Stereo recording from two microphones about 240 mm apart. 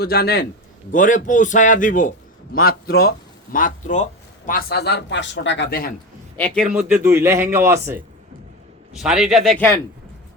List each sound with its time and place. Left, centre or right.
0.0 s a man's voice: left
6.3 s a man's voice: centre
6.7 s a man's voice: centre